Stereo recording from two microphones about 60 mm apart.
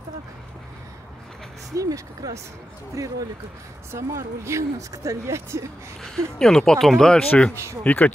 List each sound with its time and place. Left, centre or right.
1.8 s speech: right
3.9 s speech: right
6.0 s speech: centre
7.8 s speech: left